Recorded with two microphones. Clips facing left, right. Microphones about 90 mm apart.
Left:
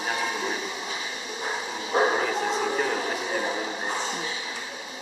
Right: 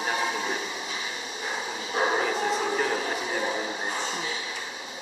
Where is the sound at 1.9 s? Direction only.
35° left (ahead or behind).